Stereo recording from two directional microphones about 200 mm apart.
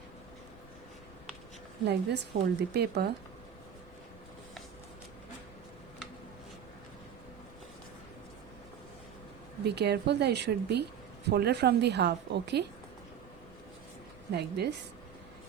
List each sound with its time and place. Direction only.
1.8 s a woman's voice: 55° right (ahead or behind)
9.6 s a woman's voice: 55° right (ahead or behind)
14.3 s a woman's voice: 55° right (ahead or behind)